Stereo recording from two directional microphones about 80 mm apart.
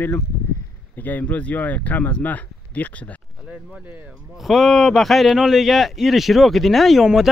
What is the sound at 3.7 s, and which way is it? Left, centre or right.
Speech, centre.